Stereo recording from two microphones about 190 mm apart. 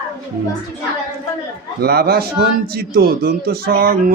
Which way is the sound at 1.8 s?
55° right (ahead or behind).